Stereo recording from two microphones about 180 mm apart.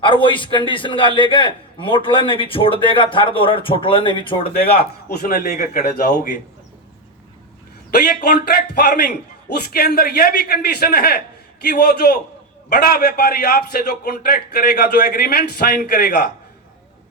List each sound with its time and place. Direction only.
0.0 s a man's voice: 30° left (ahead or behind)
4.5 s a man's voice: 65° left (ahead or behind)
7.9 s a man's voice: 60° left (ahead or behind)